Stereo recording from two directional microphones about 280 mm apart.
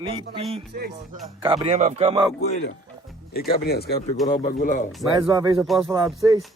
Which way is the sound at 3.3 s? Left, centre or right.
Left.